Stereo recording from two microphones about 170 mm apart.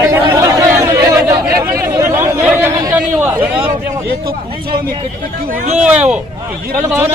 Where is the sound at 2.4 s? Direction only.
10° right (ahead or behind).